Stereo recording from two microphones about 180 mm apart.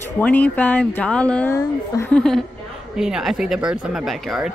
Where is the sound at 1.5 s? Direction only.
15° left (ahead or behind).